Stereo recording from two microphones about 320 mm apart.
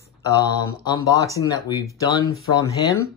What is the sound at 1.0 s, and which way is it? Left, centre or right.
Speech, centre.